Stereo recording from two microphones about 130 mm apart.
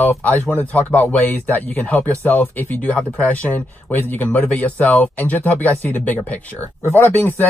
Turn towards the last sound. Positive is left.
turn(degrees=15)  # may be behind; listen again after turning